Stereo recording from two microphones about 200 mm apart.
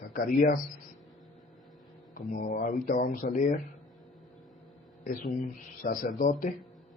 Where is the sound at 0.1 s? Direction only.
45° left (ahead or behind).